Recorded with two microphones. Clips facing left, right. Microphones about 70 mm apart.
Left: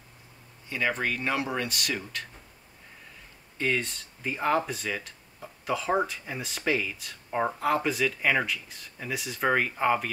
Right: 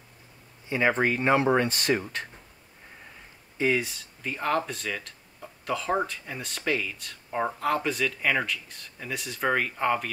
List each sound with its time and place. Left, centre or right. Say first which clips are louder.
0.7 s speech: right 5 dB; right
3.5 s speech: right 3 dB; centre